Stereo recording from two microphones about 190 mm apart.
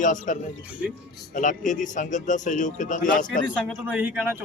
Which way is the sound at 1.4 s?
40° left (ahead or behind).